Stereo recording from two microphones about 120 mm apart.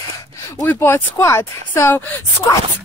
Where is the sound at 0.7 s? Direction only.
20° left (ahead or behind).